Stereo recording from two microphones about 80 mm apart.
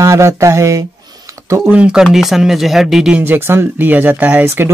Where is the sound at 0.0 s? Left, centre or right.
Right.